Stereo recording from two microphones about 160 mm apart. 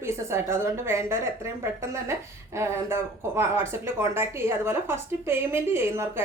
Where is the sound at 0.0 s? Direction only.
15° right (ahead or behind).